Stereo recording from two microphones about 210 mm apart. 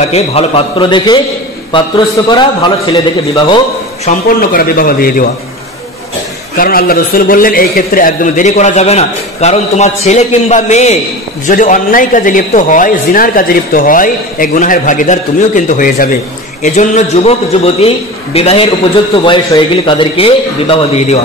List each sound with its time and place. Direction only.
0.0 s a man's voice: 30° left (ahead or behind)
4.4 s a man's voice: 45° left (ahead or behind)
6.5 s a man's voice: 45° left (ahead or behind); by 21.2 s 30° left (ahead or behind)